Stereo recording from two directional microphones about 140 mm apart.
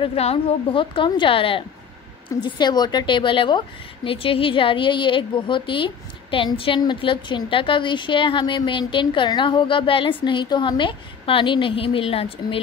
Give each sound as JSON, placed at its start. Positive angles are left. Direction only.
{"t": 0.0, "sound": "a woman's voice", "side_deg": 45}